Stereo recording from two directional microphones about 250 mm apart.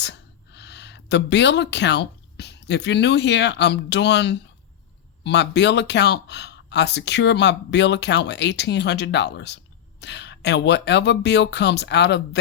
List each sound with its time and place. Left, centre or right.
0.0 s speech: left